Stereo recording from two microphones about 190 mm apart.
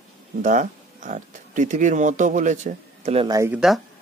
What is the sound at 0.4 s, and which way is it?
Speech, 40° right (ahead or behind).